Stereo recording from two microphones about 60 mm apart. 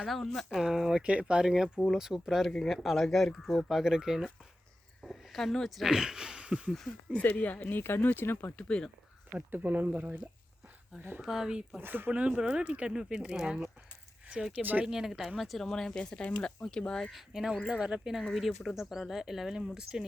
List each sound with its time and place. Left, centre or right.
0.1 s speech: centre
0.6 s speech: centre
5.0 s speech: centre
7.2 s speech: left
8.5 s speech: centre
9.5 s speech: right
11.2 s speech: centre
11.8 s speech: right
12.1 s speech: right
14.6 s speech: right
14.8 s speech: centre
17.1 s speech: centre
17.7 s speech: centre
18.2 s speech: centre